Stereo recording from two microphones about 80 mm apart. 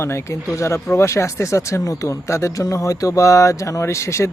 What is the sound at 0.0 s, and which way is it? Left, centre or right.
Speech, left.